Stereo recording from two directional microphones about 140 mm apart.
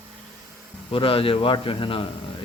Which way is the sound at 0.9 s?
40° left (ahead or behind).